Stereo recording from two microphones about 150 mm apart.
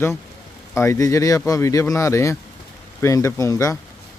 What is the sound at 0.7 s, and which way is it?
Speech, 20° left (ahead or behind).